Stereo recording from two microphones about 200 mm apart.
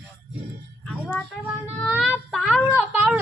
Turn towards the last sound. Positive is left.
turn(degrees=-5)  # may be behind; listen again after turning